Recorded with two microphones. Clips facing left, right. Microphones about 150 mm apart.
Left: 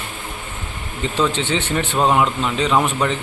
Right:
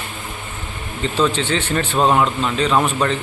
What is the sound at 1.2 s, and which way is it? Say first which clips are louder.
A man's voice: right 1 dB; 15° left (ahead or behind).